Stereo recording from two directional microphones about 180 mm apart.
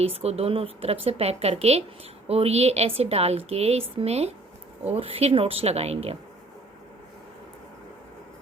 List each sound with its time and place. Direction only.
0.0 s a woman's voice: 35° right (ahead or behind)